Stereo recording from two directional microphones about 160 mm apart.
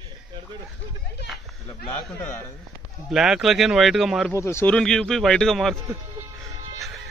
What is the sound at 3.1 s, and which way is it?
Speech, 5° right (ahead or behind).